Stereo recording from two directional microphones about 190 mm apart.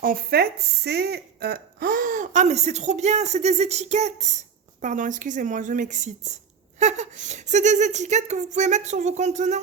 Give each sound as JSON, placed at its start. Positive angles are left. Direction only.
{"t": 0.0, "sound": "speech", "side_deg": -50}